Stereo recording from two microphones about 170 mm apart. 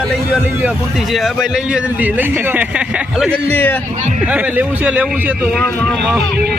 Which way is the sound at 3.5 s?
10° left (ahead or behind).